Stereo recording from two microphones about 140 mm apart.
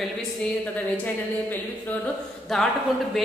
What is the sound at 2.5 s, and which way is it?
Speech, 5° left (ahead or behind).